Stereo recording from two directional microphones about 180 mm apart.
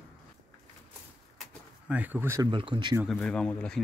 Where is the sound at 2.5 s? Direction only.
25° right (ahead or behind).